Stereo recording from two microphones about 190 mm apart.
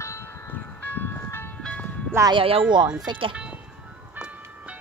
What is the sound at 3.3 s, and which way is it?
Music, 5° right (ahead or behind).